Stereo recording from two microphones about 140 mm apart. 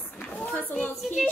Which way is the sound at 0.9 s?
Centre (ahead or behind).